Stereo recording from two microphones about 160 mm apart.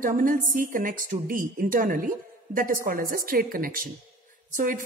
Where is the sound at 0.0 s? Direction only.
60° right (ahead or behind).